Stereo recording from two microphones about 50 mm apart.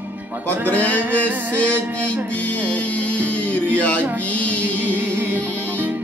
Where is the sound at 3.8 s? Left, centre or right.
Left.